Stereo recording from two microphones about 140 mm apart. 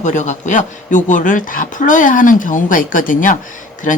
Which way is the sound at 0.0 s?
60° left (ahead or behind).